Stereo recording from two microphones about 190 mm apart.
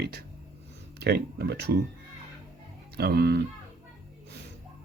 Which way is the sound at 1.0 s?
60° right (ahead or behind).